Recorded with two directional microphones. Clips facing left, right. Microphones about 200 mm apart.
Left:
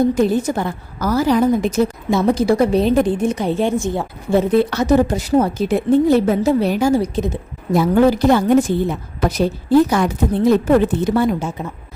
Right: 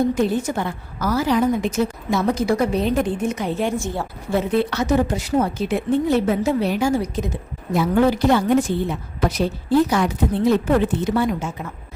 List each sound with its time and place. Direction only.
0.1 s a woman's voice: 40° left (ahead or behind); by 4.4 s 20° left (ahead or behind)
4.4 s a woman's voice: 40° left (ahead or behind)